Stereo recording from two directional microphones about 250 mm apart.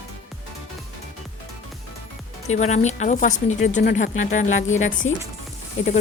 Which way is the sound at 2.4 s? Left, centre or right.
Left.